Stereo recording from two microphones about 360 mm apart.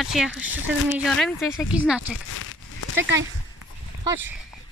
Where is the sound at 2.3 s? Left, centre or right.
Left.